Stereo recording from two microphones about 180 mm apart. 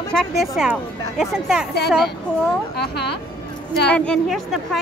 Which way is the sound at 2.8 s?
65° left (ahead or behind).